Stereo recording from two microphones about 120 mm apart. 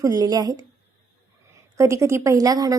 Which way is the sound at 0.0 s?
30° right (ahead or behind).